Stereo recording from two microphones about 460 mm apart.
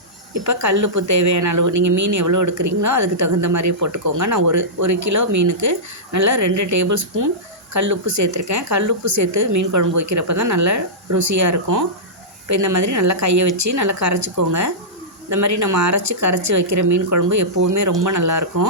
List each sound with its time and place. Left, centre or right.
0.3 s a woman's voice: right